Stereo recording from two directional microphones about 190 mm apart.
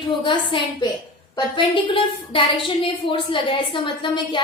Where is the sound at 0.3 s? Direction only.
25° left (ahead or behind).